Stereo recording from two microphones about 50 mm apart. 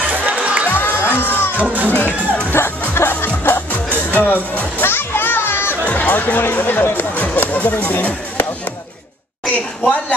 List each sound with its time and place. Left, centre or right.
0.0 s crowd: right
0.7 s crowd: left
1.6 s speech: right
2.5 s music: left
3.4 s music: left
4.8 s children playing: left
5.9 s speech: left
9.5 s a woman's voice: left